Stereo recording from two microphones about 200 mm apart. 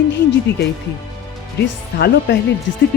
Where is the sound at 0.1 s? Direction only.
60° left (ahead or behind).